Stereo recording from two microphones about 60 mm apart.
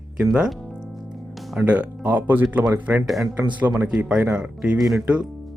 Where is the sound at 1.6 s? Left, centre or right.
Right.